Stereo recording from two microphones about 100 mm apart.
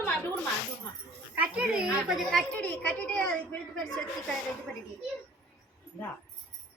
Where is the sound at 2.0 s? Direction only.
5° right (ahead or behind).